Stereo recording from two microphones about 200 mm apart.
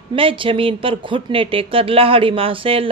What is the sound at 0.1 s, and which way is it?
A woman's voice, 25° right (ahead or behind).